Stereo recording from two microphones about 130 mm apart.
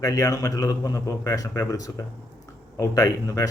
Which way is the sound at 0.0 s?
25° left (ahead or behind).